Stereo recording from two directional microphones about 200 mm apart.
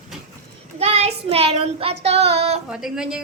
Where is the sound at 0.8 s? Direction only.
30° right (ahead or behind).